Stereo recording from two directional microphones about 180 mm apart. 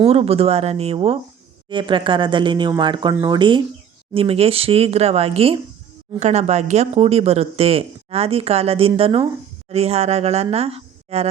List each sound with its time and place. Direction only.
0.0 s a woman's voice: 35° right (ahead or behind)